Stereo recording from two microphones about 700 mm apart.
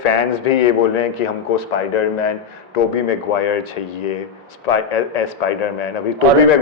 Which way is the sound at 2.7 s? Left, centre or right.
Left.